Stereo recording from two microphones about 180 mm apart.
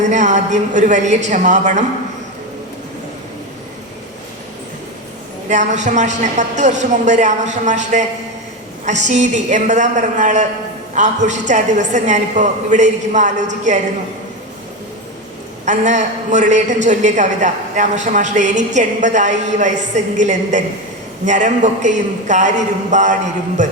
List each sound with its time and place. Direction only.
0.0 s a woman's voice: 40° right (ahead or behind)
5.5 s a woman's voice: 40° right (ahead or behind)
15.6 s a man's voice: 40° right (ahead or behind)